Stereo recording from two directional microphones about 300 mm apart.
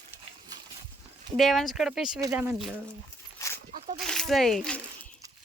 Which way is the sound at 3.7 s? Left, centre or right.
Right.